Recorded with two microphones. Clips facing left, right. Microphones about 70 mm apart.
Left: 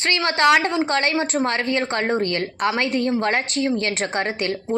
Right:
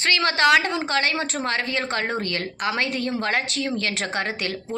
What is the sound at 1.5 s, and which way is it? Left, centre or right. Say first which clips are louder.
A woman's voice: left 3 dB; left.